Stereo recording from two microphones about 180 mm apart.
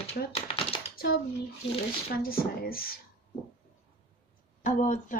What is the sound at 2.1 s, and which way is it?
Speech, 55° left (ahead or behind).